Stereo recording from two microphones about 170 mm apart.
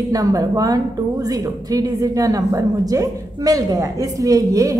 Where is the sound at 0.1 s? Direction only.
20° right (ahead or behind).